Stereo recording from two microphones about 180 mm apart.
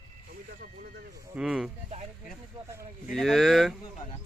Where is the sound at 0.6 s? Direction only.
50° right (ahead or behind).